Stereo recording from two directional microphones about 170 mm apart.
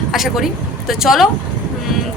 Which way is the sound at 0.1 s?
Centre (ahead or behind).